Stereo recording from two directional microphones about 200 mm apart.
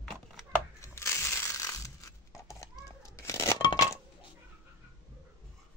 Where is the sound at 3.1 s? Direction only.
15° left (ahead or behind).